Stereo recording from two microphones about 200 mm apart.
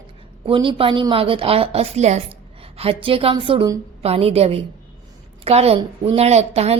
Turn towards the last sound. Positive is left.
turn(degrees=-30)  # may be behind; listen again after turning